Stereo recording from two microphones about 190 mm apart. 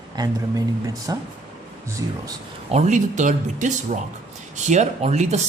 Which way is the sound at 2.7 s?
40° right (ahead or behind).